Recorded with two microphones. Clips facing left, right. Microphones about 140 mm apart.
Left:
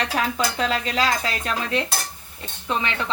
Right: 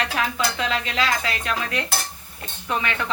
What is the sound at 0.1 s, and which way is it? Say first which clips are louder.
Speech: left 1 dB; 35° left (ahead or behind).